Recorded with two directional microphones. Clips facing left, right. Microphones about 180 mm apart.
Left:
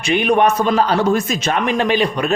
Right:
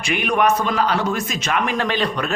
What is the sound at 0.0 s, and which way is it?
Speech, 25° left (ahead or behind).